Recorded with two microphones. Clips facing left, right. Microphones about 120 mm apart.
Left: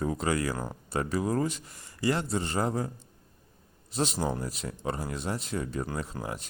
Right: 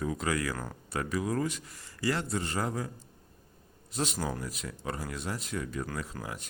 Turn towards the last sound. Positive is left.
turn(degrees=30)  # may be behind; listen again after turning